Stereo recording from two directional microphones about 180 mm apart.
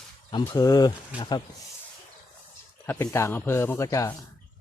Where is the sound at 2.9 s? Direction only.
15° left (ahead or behind).